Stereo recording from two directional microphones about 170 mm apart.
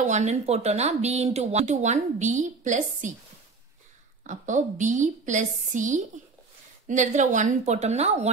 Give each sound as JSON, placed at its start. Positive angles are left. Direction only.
{"t": 0.0, "sound": "speech", "side_deg": -45}
{"t": 4.2, "sound": "speech", "side_deg": -45}